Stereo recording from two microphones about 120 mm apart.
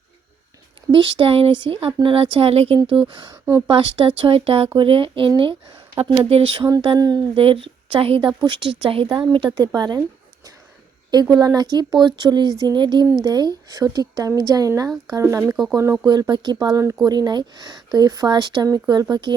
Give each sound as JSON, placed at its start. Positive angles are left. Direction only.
{"t": 0.9, "sound": "speech", "side_deg": -40}
{"t": 6.8, "sound": "speech", "side_deg": -35}
{"t": 7.3, "sound": "speech", "side_deg": -50}
{"t": 11.1, "sound": "speech", "side_deg": -35}
{"t": 16.0, "sound": "speech", "side_deg": -40}